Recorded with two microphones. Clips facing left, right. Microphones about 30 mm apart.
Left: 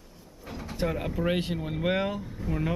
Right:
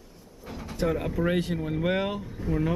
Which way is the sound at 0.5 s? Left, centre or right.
Centre.